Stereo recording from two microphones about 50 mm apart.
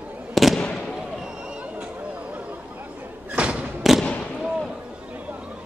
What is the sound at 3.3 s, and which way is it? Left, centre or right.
Thump, right.